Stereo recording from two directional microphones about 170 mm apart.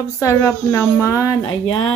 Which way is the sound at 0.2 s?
15° left (ahead or behind).